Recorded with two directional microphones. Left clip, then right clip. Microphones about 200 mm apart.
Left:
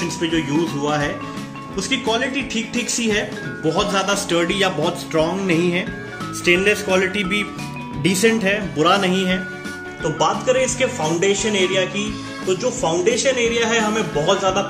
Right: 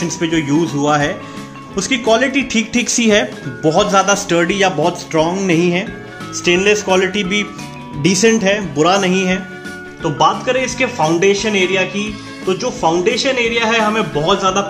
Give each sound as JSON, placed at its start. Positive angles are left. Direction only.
{"t": 0.2, "sound": "speech", "side_deg": -45}
{"t": 10.1, "sound": "speech", "side_deg": -45}